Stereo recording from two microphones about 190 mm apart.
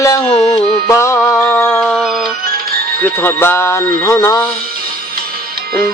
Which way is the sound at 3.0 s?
10° left (ahead or behind).